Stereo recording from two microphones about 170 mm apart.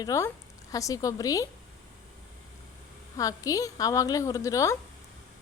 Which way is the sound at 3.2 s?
20° left (ahead or behind).